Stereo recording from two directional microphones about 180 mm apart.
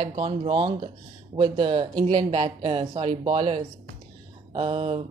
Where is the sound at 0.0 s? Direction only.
30° right (ahead or behind).